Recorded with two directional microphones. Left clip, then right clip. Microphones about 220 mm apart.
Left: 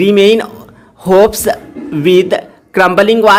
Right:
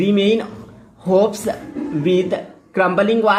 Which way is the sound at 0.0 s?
30° left (ahead or behind).